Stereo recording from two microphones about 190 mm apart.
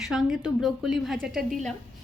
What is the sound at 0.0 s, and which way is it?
A woman's voice, centre (ahead or behind).